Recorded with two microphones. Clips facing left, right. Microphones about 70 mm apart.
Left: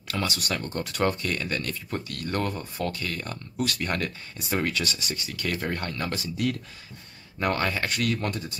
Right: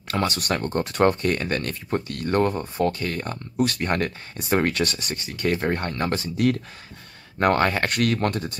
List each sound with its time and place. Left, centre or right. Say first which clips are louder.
0.1 s speech: right 5 dB; right